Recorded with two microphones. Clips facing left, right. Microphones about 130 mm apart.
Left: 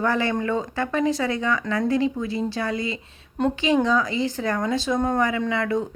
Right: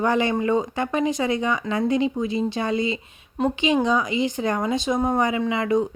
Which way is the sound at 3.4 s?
5° right (ahead or behind).